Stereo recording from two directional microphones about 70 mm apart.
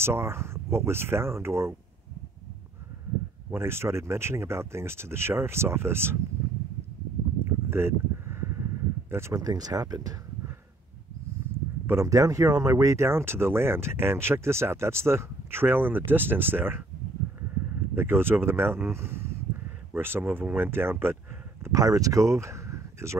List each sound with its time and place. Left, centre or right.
0.0 s speech: right
3.4 s speech: right
7.3 s a sound: right
9.3 s speech: right
11.8 s a sound: right
12.1 s speech: right
12.7 s speech: right
17.9 s speech: right
21.7 s speech: right